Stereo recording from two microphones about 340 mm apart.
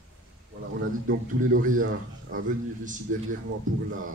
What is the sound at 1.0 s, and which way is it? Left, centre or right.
Speech, right.